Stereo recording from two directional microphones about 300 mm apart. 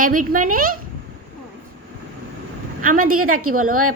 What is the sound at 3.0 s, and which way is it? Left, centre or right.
Speech, right.